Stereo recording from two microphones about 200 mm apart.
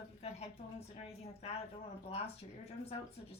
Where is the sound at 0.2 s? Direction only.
30° left (ahead or behind).